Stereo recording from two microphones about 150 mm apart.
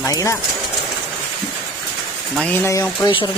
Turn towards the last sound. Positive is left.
turn(degrees=20)  # may be behind; listen again after turning